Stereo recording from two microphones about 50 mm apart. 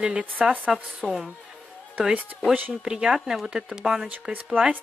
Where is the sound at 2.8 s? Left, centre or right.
Centre.